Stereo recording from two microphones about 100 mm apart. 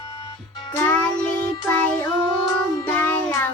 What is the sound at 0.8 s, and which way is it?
Music, 15° left (ahead or behind).